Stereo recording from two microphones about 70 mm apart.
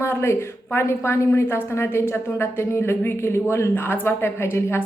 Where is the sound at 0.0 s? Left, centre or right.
Left.